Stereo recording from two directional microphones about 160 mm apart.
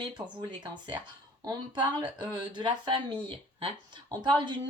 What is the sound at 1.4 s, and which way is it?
Speech, 25° right (ahead or behind).